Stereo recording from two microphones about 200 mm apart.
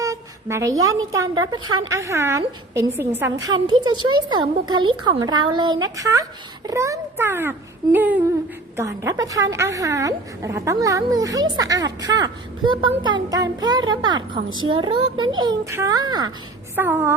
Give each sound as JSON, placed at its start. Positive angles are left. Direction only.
{"t": 0.0, "sound": "a woman's voice", "side_deg": -15}